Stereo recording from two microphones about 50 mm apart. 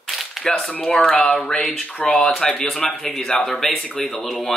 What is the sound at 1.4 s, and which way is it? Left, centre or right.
Speech, centre.